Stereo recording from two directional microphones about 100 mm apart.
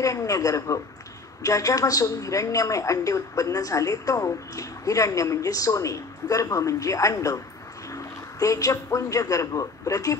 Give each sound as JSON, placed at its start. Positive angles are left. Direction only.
{"t": 0.0, "sound": "a man's voice", "side_deg": 35}